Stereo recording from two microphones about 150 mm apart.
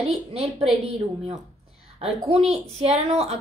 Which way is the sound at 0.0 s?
40° right (ahead or behind).